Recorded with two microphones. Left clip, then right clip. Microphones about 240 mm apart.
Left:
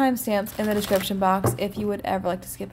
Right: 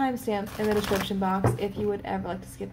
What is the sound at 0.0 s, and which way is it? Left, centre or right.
A woman's voice, left.